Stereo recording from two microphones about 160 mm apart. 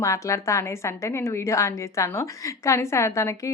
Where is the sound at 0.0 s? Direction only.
20° left (ahead or behind).